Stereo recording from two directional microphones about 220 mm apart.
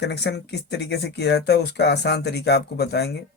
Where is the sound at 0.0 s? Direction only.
50° left (ahead or behind).